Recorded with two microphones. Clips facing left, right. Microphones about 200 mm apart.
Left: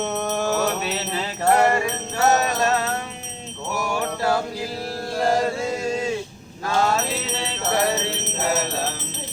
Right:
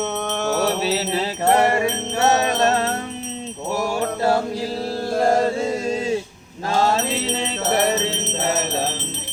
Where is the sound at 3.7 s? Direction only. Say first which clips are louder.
Right 3 dB; 30° right (ahead or behind).